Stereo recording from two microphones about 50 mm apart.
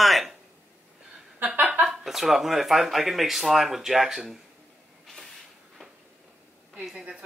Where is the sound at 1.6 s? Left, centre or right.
Right.